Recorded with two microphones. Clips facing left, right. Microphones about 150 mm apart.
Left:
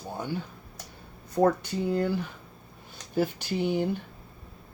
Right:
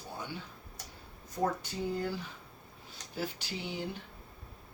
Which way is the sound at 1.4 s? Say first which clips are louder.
Left 9 dB; 70° left (ahead or behind).